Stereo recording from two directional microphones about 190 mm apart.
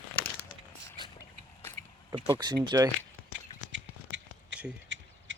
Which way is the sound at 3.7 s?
75° right (ahead or behind).